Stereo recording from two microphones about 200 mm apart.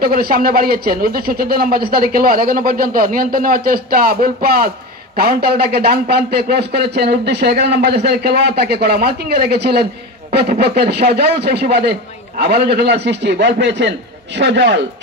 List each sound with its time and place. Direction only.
0.0 s a man's voice: 50° right (ahead or behind)